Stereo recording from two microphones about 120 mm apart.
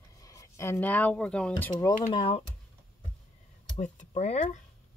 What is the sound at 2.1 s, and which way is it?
Speech, 50° left (ahead or behind).